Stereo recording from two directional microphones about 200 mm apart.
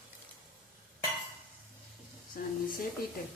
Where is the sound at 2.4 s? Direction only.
45° left (ahead or behind).